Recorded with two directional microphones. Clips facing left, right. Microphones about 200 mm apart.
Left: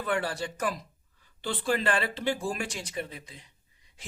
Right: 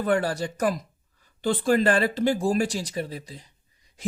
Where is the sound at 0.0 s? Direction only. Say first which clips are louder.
Right 6 dB; 40° right (ahead or behind).